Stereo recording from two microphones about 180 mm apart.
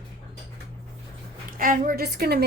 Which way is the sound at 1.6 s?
50° right (ahead or behind).